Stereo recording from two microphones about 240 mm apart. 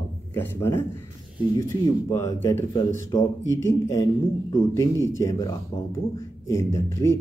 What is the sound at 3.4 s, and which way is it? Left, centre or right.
Speech, left.